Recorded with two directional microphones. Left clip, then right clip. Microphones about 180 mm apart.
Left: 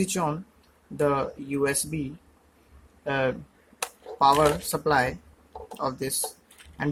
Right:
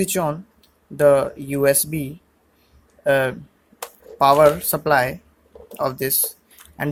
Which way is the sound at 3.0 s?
30° right (ahead or behind).